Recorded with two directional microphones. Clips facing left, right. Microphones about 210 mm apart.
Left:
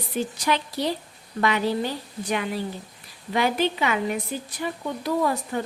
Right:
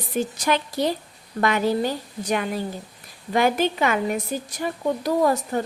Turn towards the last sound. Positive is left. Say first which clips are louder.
# right 4 dB
turn(degrees=-40)  # may be behind; listen again after turning